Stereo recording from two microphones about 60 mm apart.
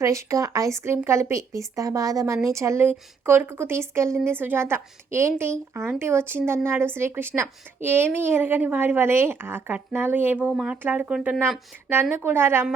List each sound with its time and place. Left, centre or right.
0.0 s speech: right
0.8 s speech: right
2.8 s a woman's voice: right
4.3 s a woman's voice: right
10.5 s speech: centre
10.8 s speech: right
12.1 s a woman's voice: right